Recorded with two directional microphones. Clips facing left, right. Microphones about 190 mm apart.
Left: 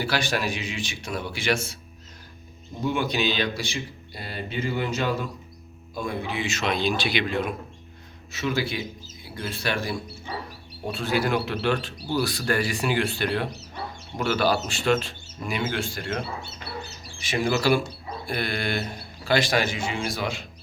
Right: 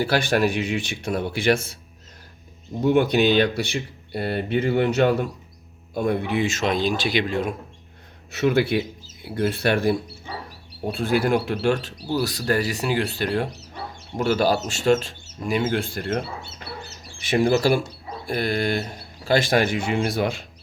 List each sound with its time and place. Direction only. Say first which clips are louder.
0.0 s speech: right 6 dB; 55° right (ahead or behind)
2.8 s speech: right 7 dB; 60° right (ahead or behind); by 7.5 s 40° right (ahead or behind)
8.3 s speech: right 7 dB; 60° right (ahead or behind)
17.4 s speech: right 2 dB; 45° right (ahead or behind)